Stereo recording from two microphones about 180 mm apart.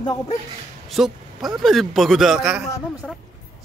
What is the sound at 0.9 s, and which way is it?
Speech, centre (ahead or behind).